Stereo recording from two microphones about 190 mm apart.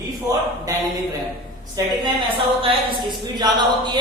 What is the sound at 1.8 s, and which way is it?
Speech, 20° right (ahead or behind).